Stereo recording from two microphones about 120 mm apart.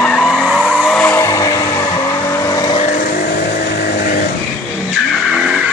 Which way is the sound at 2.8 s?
75° left (ahead or behind).